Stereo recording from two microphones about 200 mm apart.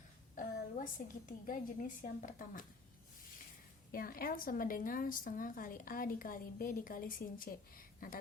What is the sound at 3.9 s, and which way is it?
A woman's voice, 45° left (ahead or behind).